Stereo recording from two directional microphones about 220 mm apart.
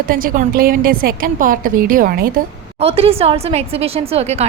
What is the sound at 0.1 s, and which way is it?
A woman's voice, 40° right (ahead or behind).